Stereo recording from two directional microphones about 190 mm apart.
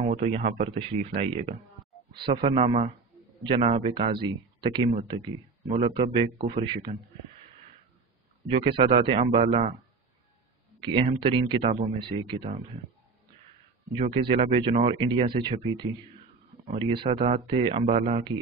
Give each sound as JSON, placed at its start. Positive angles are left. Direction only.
{"t": 0.0, "sound": "speech", "side_deg": -35}
{"t": 2.1, "sound": "speech", "side_deg": -25}
{"t": 8.5, "sound": "speech", "side_deg": -30}
{"t": 10.8, "sound": "speech", "side_deg": -25}
{"t": 13.9, "sound": "speech", "side_deg": -30}